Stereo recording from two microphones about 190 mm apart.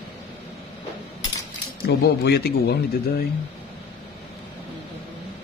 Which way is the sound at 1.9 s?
55° left (ahead or behind).